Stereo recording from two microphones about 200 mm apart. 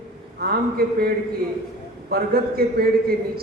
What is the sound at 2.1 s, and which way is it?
Speech, 50° right (ahead or behind).